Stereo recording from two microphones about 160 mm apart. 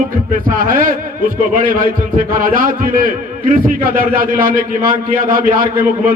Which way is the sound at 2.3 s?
60° right (ahead or behind).